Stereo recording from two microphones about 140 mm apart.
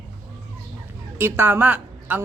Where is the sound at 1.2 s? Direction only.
15° right (ahead or behind).